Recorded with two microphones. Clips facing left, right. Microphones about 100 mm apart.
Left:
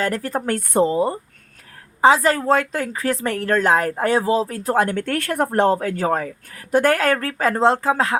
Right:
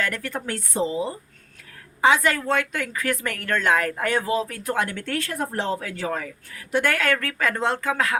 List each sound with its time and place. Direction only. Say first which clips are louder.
0.0 s a woman's voice: left 6 dB; 35° left (ahead or behind); by 1.2 s 55° left (ahead or behind)
2.0 s a woman's voice: left 5 dB; 35° left (ahead or behind)